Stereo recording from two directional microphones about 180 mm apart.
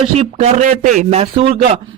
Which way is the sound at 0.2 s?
35° right (ahead or behind).